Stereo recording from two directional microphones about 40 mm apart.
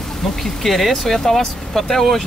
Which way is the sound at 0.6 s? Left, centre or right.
Centre.